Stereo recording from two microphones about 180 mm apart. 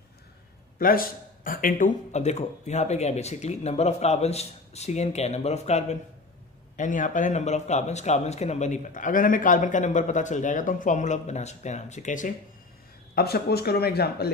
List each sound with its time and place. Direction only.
0.7 s speech: 55° left (ahead or behind)
13.1 s speech: 60° left (ahead or behind)